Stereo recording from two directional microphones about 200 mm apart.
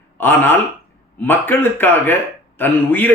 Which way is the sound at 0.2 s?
10° left (ahead or behind).